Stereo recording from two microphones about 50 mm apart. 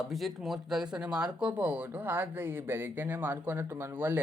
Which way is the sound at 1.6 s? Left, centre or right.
Right.